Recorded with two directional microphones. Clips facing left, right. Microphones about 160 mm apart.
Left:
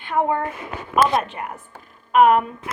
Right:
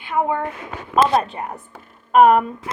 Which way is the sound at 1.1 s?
30° right (ahead or behind).